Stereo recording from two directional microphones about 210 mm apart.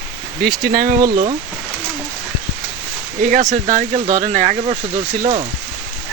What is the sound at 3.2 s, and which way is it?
Speech, 35° right (ahead or behind).